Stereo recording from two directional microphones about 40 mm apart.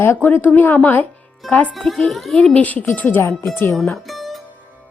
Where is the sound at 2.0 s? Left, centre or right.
Centre.